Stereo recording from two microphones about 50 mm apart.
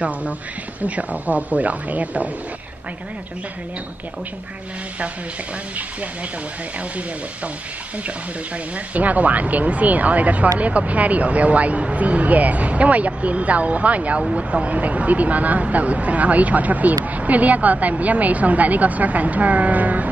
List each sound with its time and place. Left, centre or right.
0.7 s speech: right
8.7 s speech: right